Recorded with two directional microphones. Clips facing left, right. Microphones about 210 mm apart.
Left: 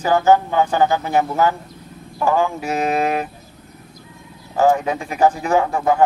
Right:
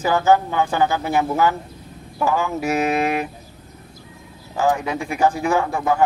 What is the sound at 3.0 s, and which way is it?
Speech, 40° left (ahead or behind).